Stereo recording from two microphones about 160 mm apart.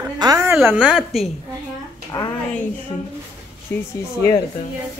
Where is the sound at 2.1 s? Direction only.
20° left (ahead or behind).